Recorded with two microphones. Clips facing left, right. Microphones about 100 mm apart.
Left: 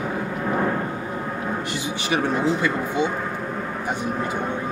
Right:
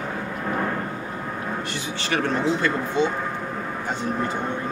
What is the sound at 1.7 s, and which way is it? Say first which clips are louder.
Speech: left 2 dB; 15° left (ahead or behind).